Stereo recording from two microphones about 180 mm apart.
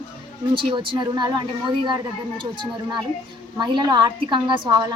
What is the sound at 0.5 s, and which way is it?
Speech, 30° right (ahead or behind).